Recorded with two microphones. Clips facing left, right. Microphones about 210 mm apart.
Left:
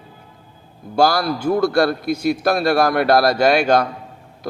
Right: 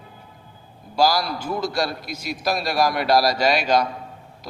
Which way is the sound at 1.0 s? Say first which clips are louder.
Left 4 dB; 55° left (ahead or behind).